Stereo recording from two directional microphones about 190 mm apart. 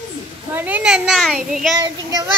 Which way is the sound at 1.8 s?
20° right (ahead or behind).